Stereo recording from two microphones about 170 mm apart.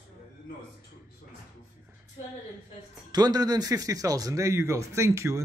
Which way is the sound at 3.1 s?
25° right (ahead or behind).